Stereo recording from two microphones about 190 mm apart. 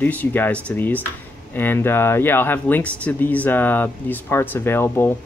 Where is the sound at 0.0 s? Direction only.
10° left (ahead or behind).